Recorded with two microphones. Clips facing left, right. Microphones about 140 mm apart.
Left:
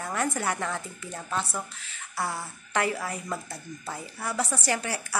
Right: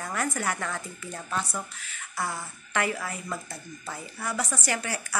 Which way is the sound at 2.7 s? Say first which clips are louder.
Left 1 dB; 30° left (ahead or behind).